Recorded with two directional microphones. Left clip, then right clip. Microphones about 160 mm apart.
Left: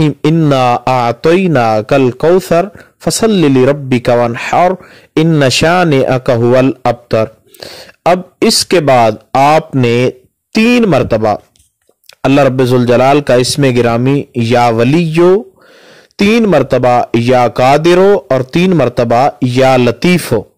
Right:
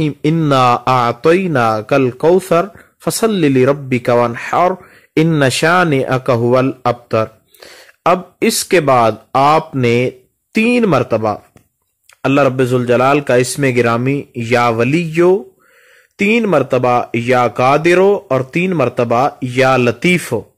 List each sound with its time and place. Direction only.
0.0 s a man's voice: 30° left (ahead or behind)